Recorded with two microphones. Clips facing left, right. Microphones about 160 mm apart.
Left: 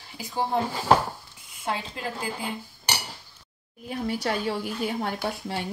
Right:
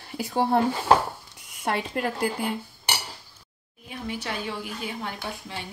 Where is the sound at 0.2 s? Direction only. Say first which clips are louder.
Right 4 dB; 60° right (ahead or behind).